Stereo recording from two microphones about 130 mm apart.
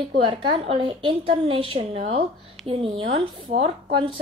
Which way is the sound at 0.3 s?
40° right (ahead or behind).